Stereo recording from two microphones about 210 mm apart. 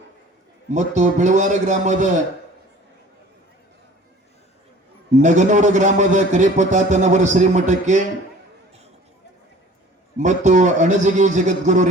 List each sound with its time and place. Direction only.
0.7 s a man's voice: 35° right (ahead or behind)
5.2 s a man's voice: 35° right (ahead or behind)
10.2 s a man's voice: 35° right (ahead or behind)